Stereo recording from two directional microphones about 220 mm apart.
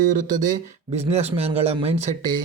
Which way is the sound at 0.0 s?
40° right (ahead or behind).